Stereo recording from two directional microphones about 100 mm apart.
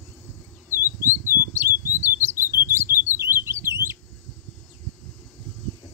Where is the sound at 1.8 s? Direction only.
25° right (ahead or behind).